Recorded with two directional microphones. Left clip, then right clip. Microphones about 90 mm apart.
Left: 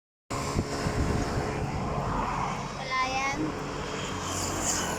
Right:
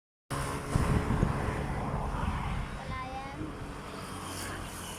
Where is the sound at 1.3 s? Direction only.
5° left (ahead or behind).